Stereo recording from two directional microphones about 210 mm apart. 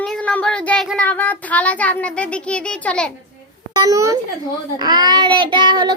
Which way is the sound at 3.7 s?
15° right (ahead or behind).